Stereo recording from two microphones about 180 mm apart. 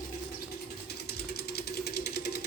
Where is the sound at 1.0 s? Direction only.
60° left (ahead or behind).